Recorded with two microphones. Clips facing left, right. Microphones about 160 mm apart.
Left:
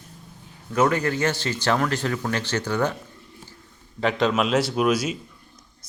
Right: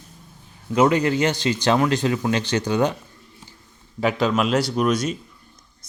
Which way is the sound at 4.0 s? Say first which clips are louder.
Right 1 dB; 5° right (ahead or behind).